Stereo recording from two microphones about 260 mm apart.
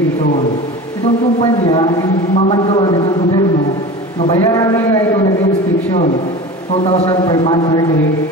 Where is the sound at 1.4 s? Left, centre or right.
Centre.